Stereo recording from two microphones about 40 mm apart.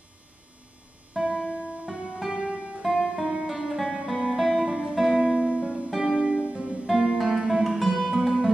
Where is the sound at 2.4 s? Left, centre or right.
Right.